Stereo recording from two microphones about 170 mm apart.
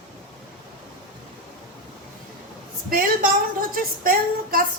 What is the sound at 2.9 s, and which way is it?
A woman's voice, 60° right (ahead or behind).